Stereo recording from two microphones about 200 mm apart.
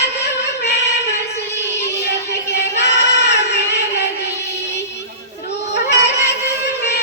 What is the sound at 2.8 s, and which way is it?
Child singing, 55° left (ahead or behind).